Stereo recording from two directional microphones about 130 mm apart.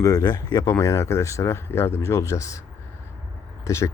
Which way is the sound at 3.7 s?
20° left (ahead or behind).